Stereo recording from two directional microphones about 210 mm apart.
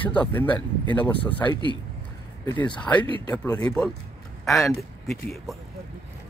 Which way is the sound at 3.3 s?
5° left (ahead or behind).